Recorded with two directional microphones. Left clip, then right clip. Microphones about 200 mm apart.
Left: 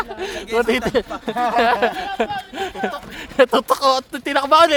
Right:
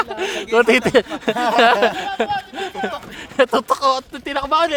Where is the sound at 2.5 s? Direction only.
10° left (ahead or behind).